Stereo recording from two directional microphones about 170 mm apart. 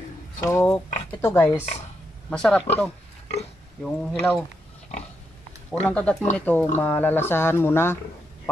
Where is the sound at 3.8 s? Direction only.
Centre (ahead or behind).